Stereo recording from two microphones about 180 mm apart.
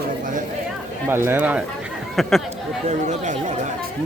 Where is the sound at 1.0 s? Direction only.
15° right (ahead or behind).